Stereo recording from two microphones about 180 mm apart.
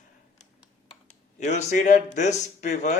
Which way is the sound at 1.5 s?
40° left (ahead or behind).